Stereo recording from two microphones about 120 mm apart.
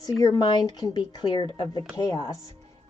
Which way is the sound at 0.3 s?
35° left (ahead or behind).